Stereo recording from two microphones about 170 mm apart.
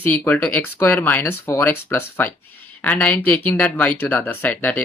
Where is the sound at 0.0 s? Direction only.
10° left (ahead or behind).